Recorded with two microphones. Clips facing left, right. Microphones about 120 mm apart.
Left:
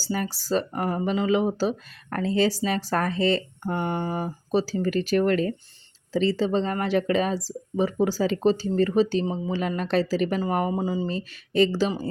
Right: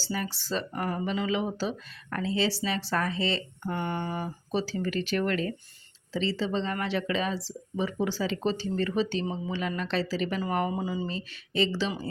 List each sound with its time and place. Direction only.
0.0 s speech: 45° left (ahead or behind)